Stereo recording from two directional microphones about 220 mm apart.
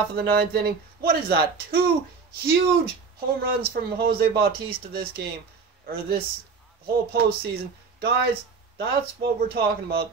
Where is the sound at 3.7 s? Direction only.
45° right (ahead or behind).